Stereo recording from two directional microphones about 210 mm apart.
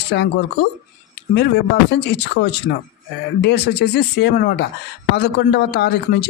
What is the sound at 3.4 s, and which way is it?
Speech, 50° left (ahead or behind).